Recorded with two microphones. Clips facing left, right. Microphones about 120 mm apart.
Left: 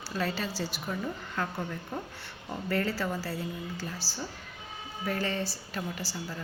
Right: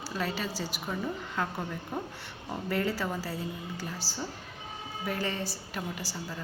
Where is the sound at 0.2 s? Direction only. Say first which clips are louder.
Left 2 dB; 15° right (ahead or behind).